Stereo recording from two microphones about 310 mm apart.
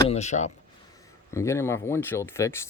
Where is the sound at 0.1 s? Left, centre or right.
Left.